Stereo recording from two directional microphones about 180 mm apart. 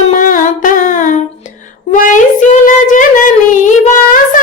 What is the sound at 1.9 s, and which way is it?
Child singing, 45° left (ahead or behind).